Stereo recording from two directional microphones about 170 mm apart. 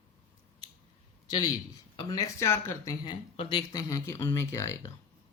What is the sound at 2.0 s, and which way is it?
Speech, 20° left (ahead or behind).